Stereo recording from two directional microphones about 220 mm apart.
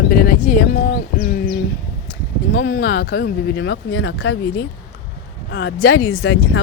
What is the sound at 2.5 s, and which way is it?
Speech, 45° left (ahead or behind).